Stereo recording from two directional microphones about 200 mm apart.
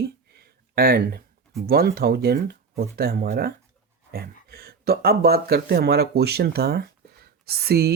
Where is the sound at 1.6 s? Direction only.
50° right (ahead or behind).